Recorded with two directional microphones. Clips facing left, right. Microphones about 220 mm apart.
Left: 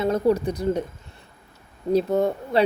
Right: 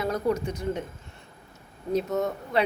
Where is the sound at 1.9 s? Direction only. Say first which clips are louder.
Left 6 dB; 30° left (ahead or behind).